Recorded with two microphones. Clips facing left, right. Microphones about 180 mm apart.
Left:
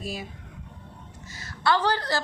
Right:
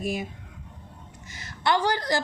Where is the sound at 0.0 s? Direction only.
20° right (ahead or behind).